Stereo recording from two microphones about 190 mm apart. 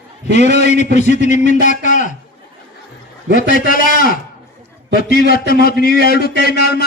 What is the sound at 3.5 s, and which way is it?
A man's voice, 50° left (ahead or behind).